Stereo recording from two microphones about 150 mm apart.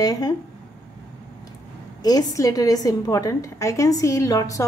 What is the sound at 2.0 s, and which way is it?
A woman's voice, 25° left (ahead or behind).